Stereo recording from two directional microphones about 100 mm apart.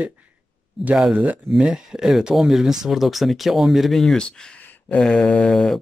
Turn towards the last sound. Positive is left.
turn(degrees=5)  # may be behind; listen again after turning